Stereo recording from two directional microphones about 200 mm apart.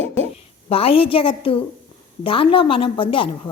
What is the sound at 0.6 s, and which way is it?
A woman's voice, 30° left (ahead or behind).